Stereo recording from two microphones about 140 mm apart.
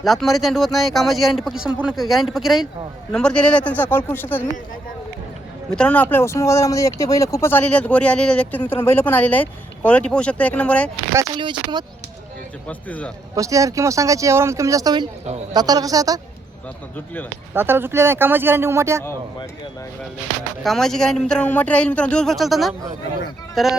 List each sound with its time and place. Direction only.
0.0 s speech: centre (ahead or behind)
5.7 s speech: 10° left (ahead or behind)
11.3 s speech: 35° right (ahead or behind)
12.6 s speech: 10° left (ahead or behind)
13.3 s speech: 25° right (ahead or behind)
17.5 s speech: 15° right (ahead or behind)
20.7 s speech: 5° left (ahead or behind)